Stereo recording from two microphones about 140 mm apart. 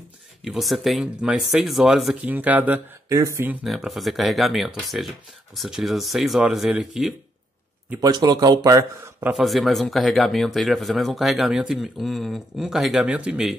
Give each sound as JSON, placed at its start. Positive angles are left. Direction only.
{"t": 0.4, "sound": "speech", "side_deg": 0}
{"t": 3.2, "sound": "speech", "side_deg": -25}
{"t": 3.6, "sound": "speech", "side_deg": 0}
{"t": 8.0, "sound": "speech", "side_deg": -25}
{"t": 9.2, "sound": "speech", "side_deg": 0}